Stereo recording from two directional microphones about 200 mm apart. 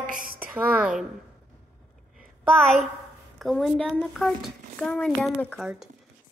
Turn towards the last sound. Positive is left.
turn(degrees=0)  # may be behind; listen again after turning